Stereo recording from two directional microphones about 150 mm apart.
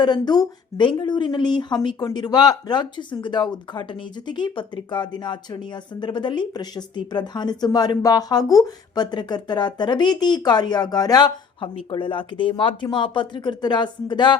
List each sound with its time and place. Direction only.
0.0 s a woman's voice: 30° left (ahead or behind)